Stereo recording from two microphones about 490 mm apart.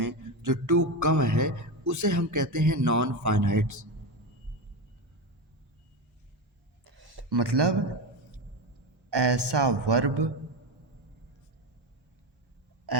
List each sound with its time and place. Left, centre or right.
0.0 s speech: right
6.8 s a sound: right
9.0 s a woman's voice: right
12.9 s burping: right